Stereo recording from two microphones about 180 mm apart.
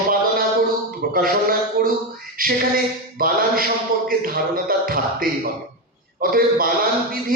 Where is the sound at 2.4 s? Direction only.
55° right (ahead or behind).